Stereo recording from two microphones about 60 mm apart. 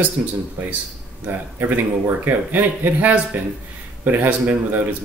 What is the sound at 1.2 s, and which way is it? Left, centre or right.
Speech, right.